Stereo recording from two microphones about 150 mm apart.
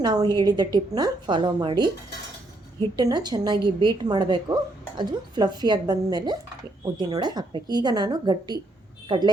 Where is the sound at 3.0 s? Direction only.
30° right (ahead or behind).